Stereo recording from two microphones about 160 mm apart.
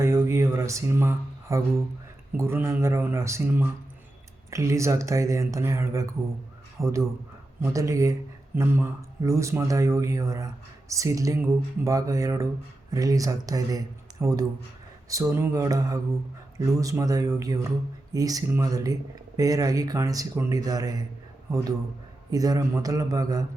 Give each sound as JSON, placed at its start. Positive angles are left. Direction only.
{"t": 0.0, "sound": "a sound", "side_deg": -15}
{"t": 2.4, "sound": "a man's voice", "side_deg": -15}
{"t": 22.3, "sound": "speech", "side_deg": -25}